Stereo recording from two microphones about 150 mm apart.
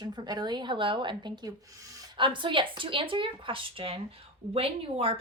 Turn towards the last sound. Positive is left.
turn(degrees=-40)  # may be behind; listen again after turning